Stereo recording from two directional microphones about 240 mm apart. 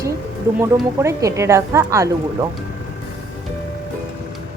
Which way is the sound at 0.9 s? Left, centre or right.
Centre.